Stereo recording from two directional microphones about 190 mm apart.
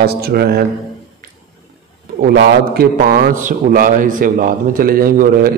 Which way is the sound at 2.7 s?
50° right (ahead or behind).